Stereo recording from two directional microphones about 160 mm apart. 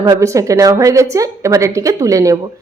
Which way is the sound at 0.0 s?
20° right (ahead or behind).